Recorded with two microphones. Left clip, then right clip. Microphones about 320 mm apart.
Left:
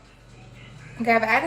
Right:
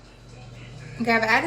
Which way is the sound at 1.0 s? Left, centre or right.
Centre.